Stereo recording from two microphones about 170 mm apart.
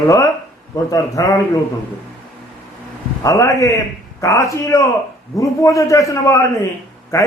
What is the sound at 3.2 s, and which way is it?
A man's voice, 20° left (ahead or behind).